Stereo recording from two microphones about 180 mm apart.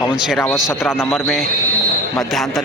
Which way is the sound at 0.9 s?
15° left (ahead or behind).